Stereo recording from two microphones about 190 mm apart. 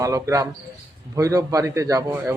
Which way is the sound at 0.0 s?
15° right (ahead or behind).